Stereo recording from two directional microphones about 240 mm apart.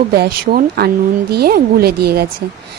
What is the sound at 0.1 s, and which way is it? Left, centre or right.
A woman's voice, right.